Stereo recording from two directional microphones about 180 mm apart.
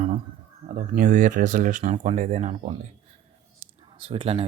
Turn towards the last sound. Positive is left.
turn(degrees=-30)  # may be behind; listen again after turning